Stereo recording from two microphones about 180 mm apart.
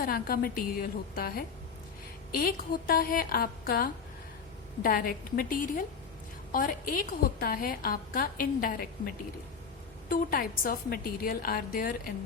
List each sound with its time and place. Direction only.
0.0 s a woman's voice: 55° left (ahead or behind)